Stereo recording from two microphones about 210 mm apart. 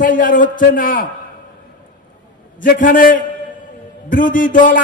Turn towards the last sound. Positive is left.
turn(degrees=40)  # may be behind; listen again after turning